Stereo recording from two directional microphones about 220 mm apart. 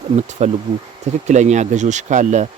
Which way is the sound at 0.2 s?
30° right (ahead or behind).